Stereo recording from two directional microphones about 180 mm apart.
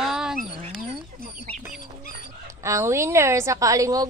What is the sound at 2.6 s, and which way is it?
Speech, 15° right (ahead or behind).